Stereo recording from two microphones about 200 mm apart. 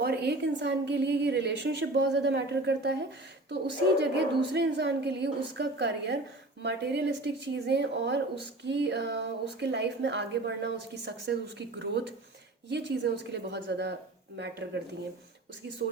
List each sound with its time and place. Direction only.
0.0 s a woman's voice: 55° right (ahead or behind)